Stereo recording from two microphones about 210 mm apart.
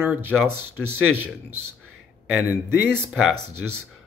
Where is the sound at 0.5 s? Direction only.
90° right.